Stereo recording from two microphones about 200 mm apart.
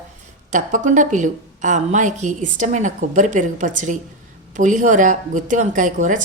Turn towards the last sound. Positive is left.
turn(degrees=-40)  # may be behind; listen again after turning